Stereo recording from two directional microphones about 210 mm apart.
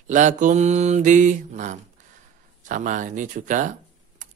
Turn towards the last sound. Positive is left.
turn(degrees=-35)  # may be behind; listen again after turning